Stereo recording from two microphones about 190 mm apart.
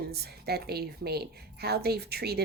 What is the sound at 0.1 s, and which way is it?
A woman's voice, 55° right (ahead or behind).